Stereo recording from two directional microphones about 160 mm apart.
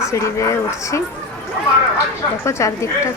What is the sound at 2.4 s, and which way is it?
Speech, 20° left (ahead or behind).